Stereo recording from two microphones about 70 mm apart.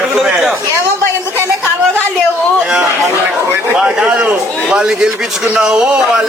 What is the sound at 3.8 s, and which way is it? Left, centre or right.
A man's voice, centre.